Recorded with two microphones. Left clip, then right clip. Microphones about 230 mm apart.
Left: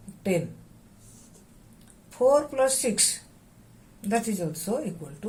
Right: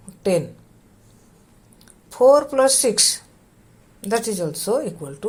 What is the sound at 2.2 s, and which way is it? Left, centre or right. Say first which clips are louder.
Speech: right 7 dB; centre.